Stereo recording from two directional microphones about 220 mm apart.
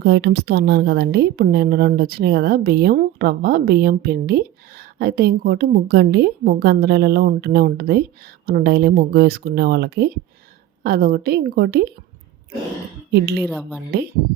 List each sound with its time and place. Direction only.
0.0 s speech: 50° right (ahead or behind)
13.1 s speech: 50° right (ahead or behind)
13.4 s speech: 5° right (ahead or behind)